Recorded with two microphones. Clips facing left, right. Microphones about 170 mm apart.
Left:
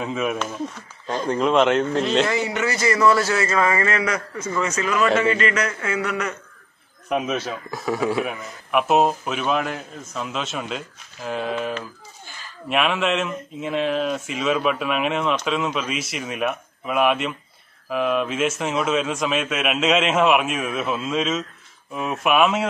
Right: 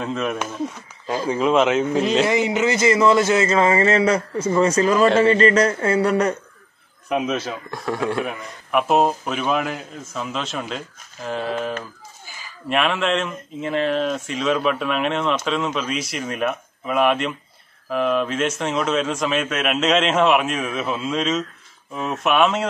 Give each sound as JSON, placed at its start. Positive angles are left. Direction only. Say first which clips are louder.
{"t": 0.0, "sound": "speech", "louder": "even", "side_deg": 5}
{"t": 2.2, "sound": "speech", "louder": "right 4 dB", "side_deg": -20}
{"t": 7.1, "sound": "speech", "louder": "right 1 dB", "side_deg": 0}
{"t": 12.3, "sound": "a sound", "louder": "right 1 dB", "side_deg": -10}
{"t": 12.6, "sound": "speech", "louder": "right 1 dB", "side_deg": 0}